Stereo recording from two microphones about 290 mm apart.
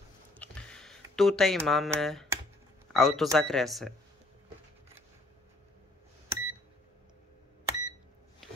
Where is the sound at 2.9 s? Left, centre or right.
Centre.